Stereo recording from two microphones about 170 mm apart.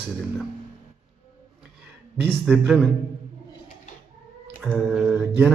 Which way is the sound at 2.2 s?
5° right (ahead or behind).